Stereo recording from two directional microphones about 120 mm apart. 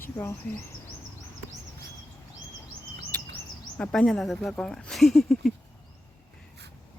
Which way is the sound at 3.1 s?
15° left (ahead or behind).